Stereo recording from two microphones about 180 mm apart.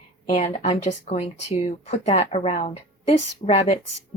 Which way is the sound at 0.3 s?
35° left (ahead or behind).